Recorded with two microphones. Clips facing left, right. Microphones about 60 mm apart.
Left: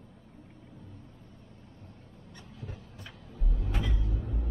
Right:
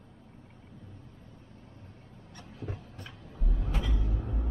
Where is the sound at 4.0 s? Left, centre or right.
Right.